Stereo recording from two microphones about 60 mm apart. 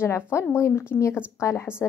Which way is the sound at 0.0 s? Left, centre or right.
Left.